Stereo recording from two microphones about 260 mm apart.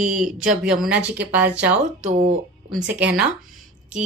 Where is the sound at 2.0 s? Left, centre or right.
Right.